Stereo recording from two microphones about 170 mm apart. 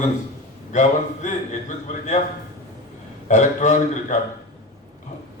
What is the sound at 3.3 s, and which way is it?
Speech, 45° left (ahead or behind).